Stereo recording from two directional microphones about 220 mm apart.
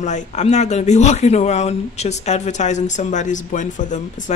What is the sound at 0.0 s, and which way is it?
Speech, 30° left (ahead or behind).